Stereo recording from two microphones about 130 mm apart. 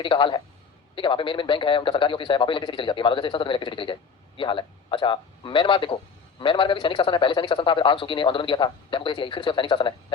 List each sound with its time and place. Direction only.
0.0 s a man's voice: 40° left (ahead or behind)